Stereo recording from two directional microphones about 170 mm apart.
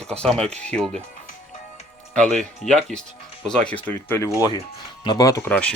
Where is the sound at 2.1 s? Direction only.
5° left (ahead or behind); by 5.5 s 20° left (ahead or behind).